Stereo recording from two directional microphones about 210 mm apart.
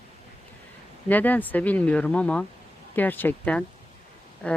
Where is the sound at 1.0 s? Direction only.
10° left (ahead or behind).